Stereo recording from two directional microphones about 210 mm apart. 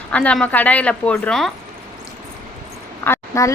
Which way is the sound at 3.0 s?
10° left (ahead or behind).